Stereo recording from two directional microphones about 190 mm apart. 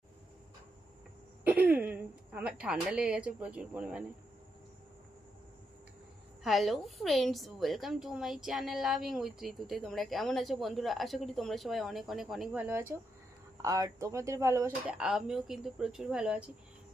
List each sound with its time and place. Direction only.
1.5 s speech: 10° right (ahead or behind)
6.4 s a woman's voice: centre (ahead or behind)
12.6 s speech: 15° right (ahead or behind)
14.8 s a woman's voice: 5° right (ahead or behind)